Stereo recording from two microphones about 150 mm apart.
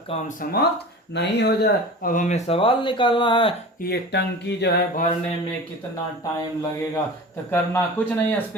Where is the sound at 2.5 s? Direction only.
35° left (ahead or behind).